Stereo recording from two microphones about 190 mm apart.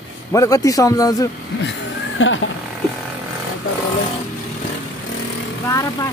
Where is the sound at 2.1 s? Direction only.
90° left.